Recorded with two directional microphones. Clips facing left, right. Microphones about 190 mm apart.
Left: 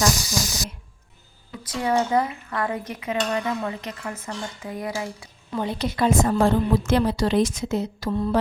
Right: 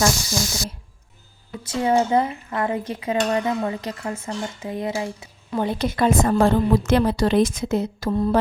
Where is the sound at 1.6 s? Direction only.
25° right (ahead or behind).